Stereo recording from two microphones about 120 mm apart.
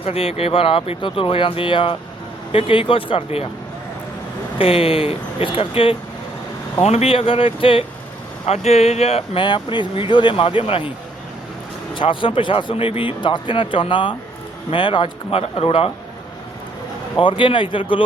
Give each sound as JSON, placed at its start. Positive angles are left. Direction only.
{"t": 0.0, "sound": "speech", "side_deg": 55}
{"t": 4.5, "sound": "speech", "side_deg": 50}
{"t": 8.4, "sound": "speech", "side_deg": 60}
{"t": 11.9, "sound": "speech", "side_deg": 45}
{"t": 17.2, "sound": "speech", "side_deg": 45}